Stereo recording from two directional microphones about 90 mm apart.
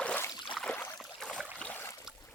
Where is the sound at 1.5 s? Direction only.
15° left (ahead or behind).